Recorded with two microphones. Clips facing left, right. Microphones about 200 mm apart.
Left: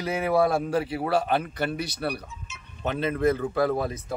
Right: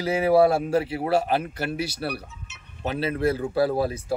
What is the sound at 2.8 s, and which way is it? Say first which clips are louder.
Speech: even; 35° right (ahead or behind).